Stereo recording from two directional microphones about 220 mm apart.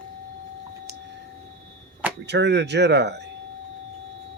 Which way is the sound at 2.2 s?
50° right (ahead or behind).